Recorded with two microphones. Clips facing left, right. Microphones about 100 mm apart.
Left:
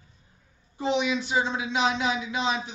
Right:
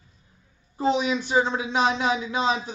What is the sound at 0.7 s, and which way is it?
Speech, 40° right (ahead or behind).